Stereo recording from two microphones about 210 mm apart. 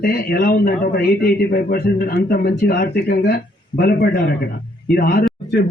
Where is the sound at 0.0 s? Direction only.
45° left (ahead or behind).